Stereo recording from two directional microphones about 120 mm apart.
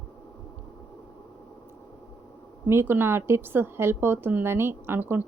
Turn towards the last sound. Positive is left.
turn(degrees=-15)  # may be behind; listen again after turning